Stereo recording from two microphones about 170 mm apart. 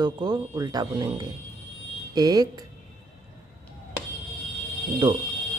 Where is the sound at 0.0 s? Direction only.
25° right (ahead or behind).